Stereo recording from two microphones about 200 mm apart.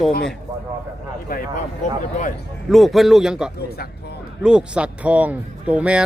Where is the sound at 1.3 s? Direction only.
45° left (ahead or behind).